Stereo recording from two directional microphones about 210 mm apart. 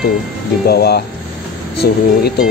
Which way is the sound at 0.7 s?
50° left (ahead or behind).